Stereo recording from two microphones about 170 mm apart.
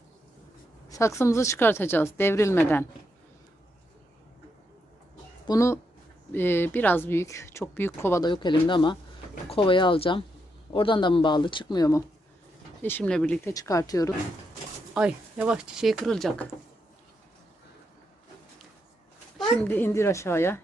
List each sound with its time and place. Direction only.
0.9 s a woman's voice: 15° left (ahead or behind)
5.5 s a woman's voice: 15° left (ahead or behind)
8.2 s speech: 25° left (ahead or behind)
12.8 s a woman's voice: 10° left (ahead or behind)
13.4 s speech: 20° left (ahead or behind)
14.9 s speech: 5° right (ahead or behind)
19.4 s a woman's voice: 10° left (ahead or behind)